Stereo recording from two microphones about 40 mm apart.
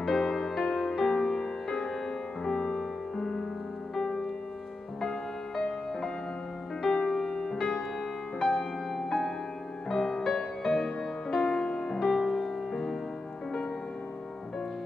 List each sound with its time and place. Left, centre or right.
0.0 s music: centre
5.6 s music: centre